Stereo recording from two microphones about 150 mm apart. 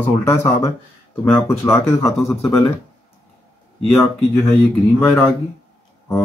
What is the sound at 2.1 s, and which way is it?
Speech, centre (ahead or behind).